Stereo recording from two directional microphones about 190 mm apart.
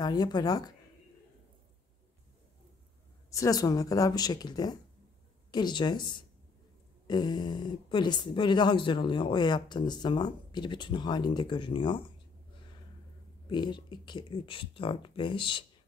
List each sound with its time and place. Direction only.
0.0 s speech: 20° left (ahead or behind)
3.3 s speech: 15° left (ahead or behind)
7.1 s speech: 20° left (ahead or behind)
13.5 s speech: 25° left (ahead or behind)